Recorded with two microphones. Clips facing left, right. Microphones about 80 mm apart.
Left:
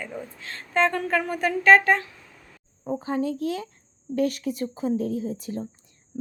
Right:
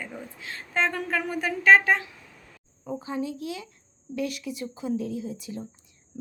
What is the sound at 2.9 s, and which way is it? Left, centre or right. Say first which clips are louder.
Speech: left 5 dB; left.